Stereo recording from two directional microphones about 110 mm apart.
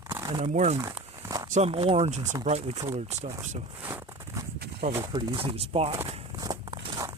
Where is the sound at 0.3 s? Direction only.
75° right (ahead or behind).